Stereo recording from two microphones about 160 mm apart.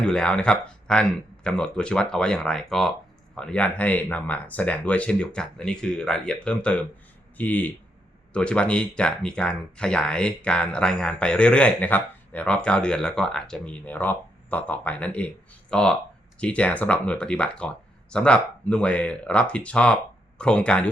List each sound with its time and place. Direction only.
0.0 s speech: 5° left (ahead or behind)